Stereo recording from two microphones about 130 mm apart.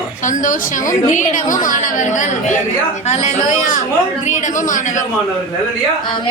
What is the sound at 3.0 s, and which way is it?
A woman's voice, 60° left (ahead or behind).